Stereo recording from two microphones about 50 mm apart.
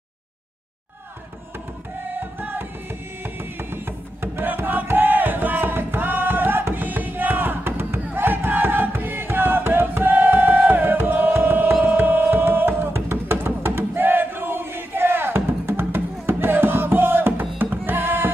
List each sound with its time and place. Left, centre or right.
2.1 s music: right